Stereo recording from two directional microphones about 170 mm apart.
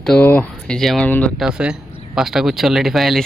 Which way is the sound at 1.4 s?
5° right (ahead or behind).